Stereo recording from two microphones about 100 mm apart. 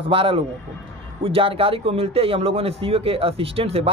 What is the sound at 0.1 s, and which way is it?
Speech, 60° right (ahead or behind).